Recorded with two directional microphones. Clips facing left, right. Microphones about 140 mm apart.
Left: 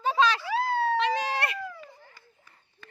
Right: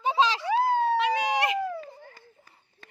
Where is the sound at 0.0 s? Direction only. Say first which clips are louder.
Even; 20° right (ahead or behind).